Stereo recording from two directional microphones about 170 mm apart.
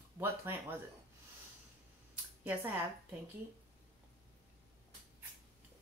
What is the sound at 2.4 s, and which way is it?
Speech, 10° right (ahead or behind).